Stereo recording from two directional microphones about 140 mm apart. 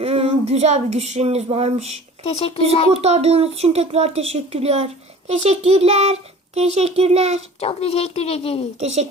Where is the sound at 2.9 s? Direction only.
50° right (ahead or behind).